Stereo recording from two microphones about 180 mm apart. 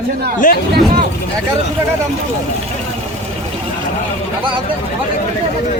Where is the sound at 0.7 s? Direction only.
55° right (ahead or behind).